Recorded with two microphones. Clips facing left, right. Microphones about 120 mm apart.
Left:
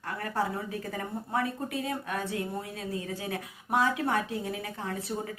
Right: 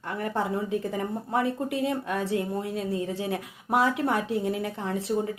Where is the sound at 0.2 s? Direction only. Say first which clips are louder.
Right 4 dB; 25° right (ahead or behind).